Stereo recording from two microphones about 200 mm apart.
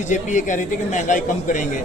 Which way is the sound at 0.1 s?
40° left (ahead or behind).